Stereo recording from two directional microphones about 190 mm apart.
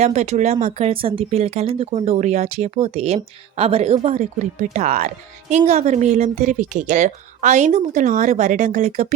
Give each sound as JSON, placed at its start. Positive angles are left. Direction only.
{"t": 0.0, "sound": "speech", "side_deg": -35}